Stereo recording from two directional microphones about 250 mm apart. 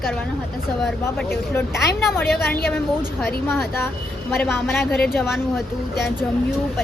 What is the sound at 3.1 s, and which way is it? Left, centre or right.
A woman's voice, centre.